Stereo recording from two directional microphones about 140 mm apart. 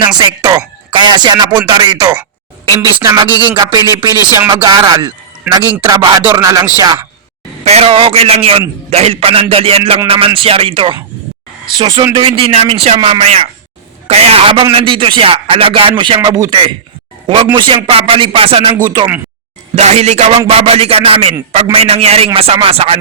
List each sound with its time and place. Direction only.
0.2 s speech: 30° right (ahead or behind)
3.3 s speech: 35° right (ahead or behind)
7.6 s a man's voice: 45° right (ahead or behind)
19.7 s a man's voice: 50° right (ahead or behind)